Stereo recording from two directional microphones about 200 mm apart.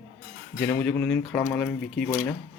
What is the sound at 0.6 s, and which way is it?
Speech, 10° left (ahead or behind).